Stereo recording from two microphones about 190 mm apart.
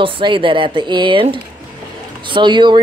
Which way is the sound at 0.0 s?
25° right (ahead or behind).